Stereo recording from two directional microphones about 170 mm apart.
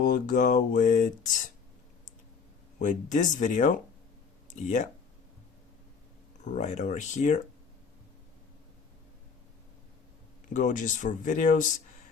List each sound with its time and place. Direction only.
0.0 s speech: 50° left (ahead or behind)
2.7 s speech: 45° left (ahead or behind)
6.4 s speech: 45° left (ahead or behind)
10.5 s speech: 45° left (ahead or behind)